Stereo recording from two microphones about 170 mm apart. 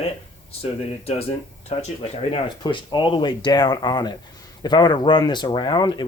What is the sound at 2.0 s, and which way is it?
Speech, 30° left (ahead or behind).